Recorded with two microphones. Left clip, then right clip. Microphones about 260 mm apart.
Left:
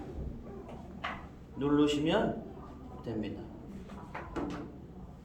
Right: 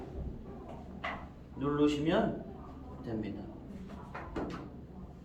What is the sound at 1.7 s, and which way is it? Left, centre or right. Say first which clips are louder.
Speech: left 1 dB; left.